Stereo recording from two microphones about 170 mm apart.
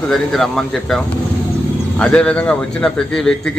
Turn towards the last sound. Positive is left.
turn(degrees=5)  # may be behind; listen again after turning